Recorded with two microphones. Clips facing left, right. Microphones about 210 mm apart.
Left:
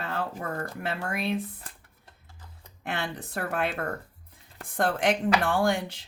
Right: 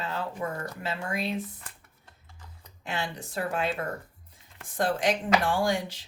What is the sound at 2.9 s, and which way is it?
Speech, 60° left (ahead or behind).